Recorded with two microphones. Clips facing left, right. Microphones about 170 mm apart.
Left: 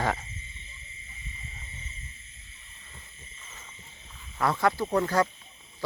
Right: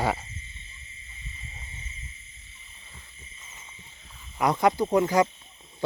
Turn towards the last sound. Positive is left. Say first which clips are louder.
# right 4 dB
turn(degrees=-15)  # may be behind; listen again after turning